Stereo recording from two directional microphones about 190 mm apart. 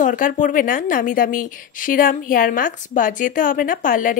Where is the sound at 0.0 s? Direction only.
45° left (ahead or behind).